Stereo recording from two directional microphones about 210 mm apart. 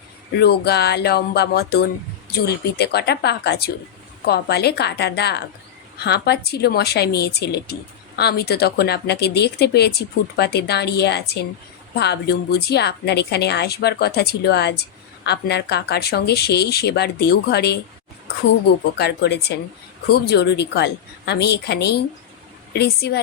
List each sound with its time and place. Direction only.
0.3 s a woman's voice: 50° left (ahead or behind)
18.9 s a woman's voice: 50° left (ahead or behind)